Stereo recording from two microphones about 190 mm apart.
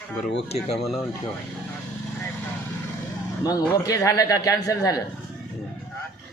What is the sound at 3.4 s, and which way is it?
Speech, 20° left (ahead or behind).